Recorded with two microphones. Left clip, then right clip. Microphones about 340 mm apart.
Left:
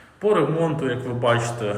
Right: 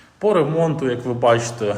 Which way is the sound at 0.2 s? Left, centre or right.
Centre.